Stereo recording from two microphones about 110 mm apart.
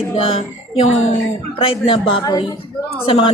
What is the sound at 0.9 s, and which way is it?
Speech, 80° left.